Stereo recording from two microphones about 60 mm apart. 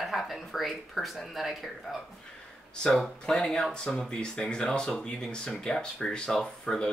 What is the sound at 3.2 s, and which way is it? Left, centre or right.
Speech, centre.